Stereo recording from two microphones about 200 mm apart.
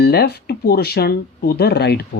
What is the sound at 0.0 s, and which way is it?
Speech, 55° left (ahead or behind).